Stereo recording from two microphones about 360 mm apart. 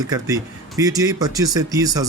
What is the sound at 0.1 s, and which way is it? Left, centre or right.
Speech, centre.